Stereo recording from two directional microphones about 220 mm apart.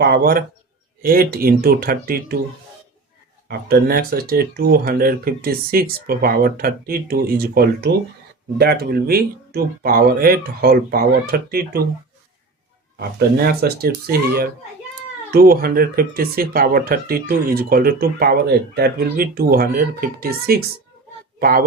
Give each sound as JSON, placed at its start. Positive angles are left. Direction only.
{"t": 0.0, "sound": "speech", "side_deg": -45}
{"t": 3.7, "sound": "speech", "side_deg": -45}
{"t": 13.0, "sound": "speech", "side_deg": -45}